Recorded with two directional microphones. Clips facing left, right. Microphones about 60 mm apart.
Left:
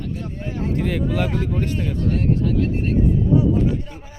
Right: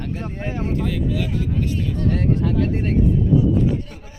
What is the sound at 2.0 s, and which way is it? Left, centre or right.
Speech, right.